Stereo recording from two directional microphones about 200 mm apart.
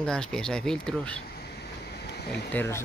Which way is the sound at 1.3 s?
55° left (ahead or behind).